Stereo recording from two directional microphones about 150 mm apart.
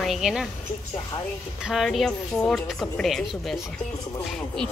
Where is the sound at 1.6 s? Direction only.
Centre (ahead or behind).